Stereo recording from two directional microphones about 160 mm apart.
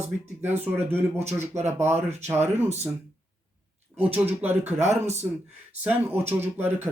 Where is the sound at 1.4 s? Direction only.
45° right (ahead or behind).